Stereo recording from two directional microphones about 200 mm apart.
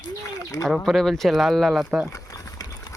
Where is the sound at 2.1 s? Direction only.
15° left (ahead or behind).